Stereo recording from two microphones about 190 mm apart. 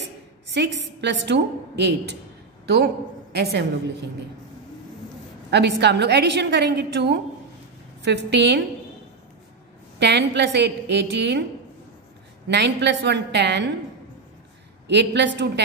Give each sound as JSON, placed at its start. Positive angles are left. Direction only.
{"t": 0.0, "sound": "a woman's voice", "side_deg": -65}
{"t": 5.5, "sound": "a woman's voice", "side_deg": -65}
{"t": 9.9, "sound": "a woman's voice", "side_deg": -65}
{"t": 12.4, "sound": "a woman's voice", "side_deg": -65}
{"t": 14.9, "sound": "a woman's voice", "side_deg": -65}